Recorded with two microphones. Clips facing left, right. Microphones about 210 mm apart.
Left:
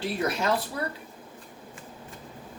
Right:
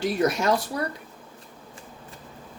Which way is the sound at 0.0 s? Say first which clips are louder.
Right 5 dB; 45° right (ahead or behind).